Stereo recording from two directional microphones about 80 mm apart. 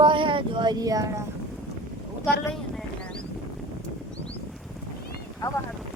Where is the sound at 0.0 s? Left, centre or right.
Right.